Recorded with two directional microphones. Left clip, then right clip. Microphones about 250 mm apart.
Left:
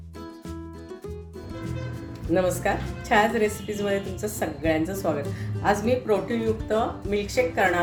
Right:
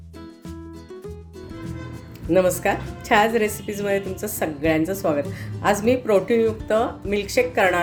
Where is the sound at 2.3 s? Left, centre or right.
Right.